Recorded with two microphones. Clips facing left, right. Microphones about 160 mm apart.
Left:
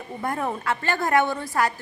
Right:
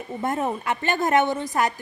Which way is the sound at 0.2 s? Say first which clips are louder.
Right 2 dB; 20° right (ahead or behind).